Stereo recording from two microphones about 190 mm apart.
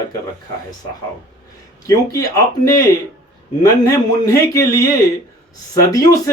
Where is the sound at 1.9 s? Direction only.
15° left (ahead or behind).